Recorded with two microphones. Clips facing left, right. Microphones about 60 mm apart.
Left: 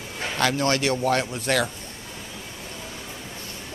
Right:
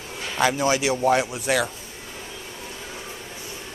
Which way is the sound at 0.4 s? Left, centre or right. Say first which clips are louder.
Right 2 dB; centre.